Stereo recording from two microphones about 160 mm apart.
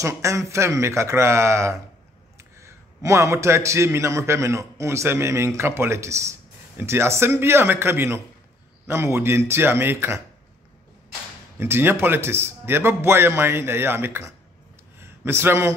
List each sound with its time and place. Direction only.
0.0 s a man's voice: 20° right (ahead or behind)
11.5 s a man's voice: 15° right (ahead or behind)
15.0 s a sound: 15° right (ahead or behind)